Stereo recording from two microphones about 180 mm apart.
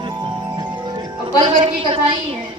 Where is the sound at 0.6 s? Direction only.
25° right (ahead or behind).